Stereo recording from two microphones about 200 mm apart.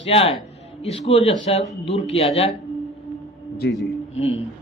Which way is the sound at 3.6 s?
60° left (ahead or behind).